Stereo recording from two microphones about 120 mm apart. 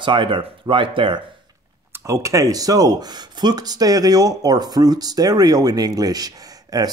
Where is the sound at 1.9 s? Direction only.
25° right (ahead or behind).